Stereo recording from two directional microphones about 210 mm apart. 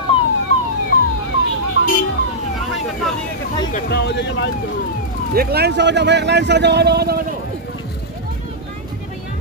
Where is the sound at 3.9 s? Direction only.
55° left (ahead or behind).